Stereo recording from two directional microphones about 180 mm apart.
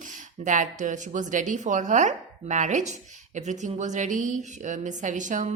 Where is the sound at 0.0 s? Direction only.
45° right (ahead or behind).